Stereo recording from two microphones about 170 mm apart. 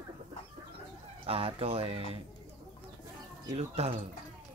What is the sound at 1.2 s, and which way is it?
Speech, 35° right (ahead or behind).